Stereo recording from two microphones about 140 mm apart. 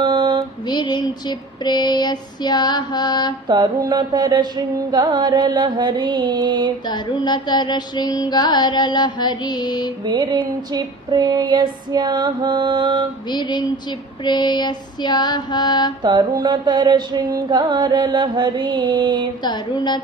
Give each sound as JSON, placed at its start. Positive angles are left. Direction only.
{"t": 0.0, "sound": "mantra", "side_deg": -30}
{"t": 0.7, "sound": "female singing", "side_deg": 30}
{"t": 3.4, "sound": "mantra", "side_deg": -30}
{"t": 6.9, "sound": "music", "side_deg": 30}
{"t": 10.0, "sound": "mantra", "side_deg": -30}
{"t": 13.3, "sound": "music", "side_deg": 30}
{"t": 16.0, "sound": "mantra", "side_deg": -30}
{"t": 19.4, "sound": "music", "side_deg": 30}